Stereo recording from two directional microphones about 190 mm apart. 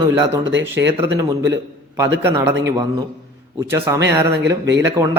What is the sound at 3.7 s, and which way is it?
Speech, 15° right (ahead or behind).